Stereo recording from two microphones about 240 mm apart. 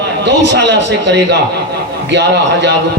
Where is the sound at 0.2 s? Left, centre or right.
Right.